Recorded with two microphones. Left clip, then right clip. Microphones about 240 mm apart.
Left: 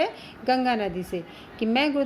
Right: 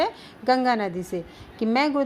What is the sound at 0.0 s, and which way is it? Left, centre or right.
A woman's voice, right.